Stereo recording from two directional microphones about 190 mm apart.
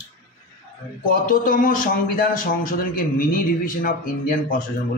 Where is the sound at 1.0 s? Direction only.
45° left (ahead or behind).